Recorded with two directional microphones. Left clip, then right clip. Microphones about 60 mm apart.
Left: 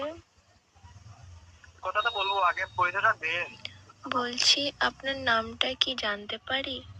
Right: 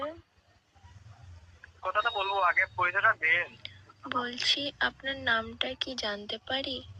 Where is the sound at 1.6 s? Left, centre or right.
Left.